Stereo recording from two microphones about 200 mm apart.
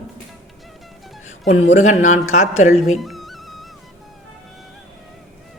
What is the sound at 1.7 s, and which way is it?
A woman's voice, 40° left (ahead or behind).